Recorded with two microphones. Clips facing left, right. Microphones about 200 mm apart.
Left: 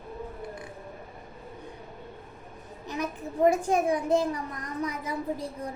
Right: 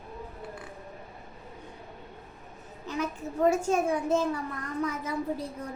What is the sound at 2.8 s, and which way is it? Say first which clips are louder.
A child's voice: right 1 dB; 15° left (ahead or behind).